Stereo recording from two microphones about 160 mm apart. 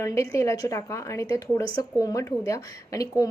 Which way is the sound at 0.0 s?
20° left (ahead or behind).